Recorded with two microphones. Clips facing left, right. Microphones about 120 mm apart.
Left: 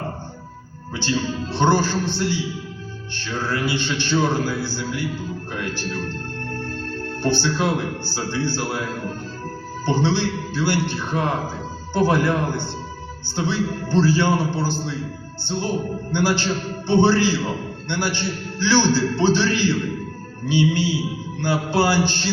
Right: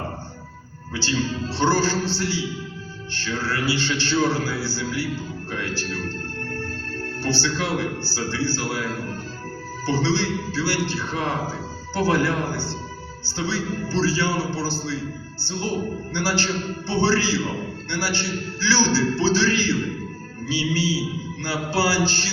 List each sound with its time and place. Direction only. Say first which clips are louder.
0.9 s a man's voice: left 1 dB; 20° left (ahead or behind)
3.4 s a man's voice: left 1 dB; 20° left (ahead or behind)
7.2 s a man's voice: left 4 dB; 20° left (ahead or behind)
9.8 s a man's voice: left 2 dB; 20° left (ahead or behind)
16.1 s a man's voice: left 4 dB; 20° left (ahead or behind)